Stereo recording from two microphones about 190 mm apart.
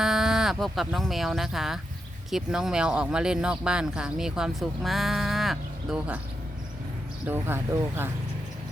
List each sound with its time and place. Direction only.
0.0 s speech: centre (ahead or behind)
7.3 s speech: 10° right (ahead or behind)